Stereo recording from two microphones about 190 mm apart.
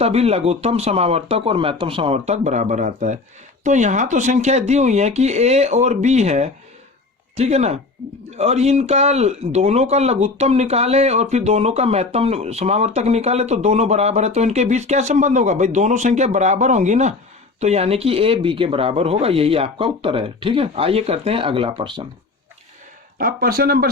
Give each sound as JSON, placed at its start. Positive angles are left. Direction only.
{"t": 0.0, "sound": "speech", "side_deg": -35}
{"t": 23.1, "sound": "speech", "side_deg": -50}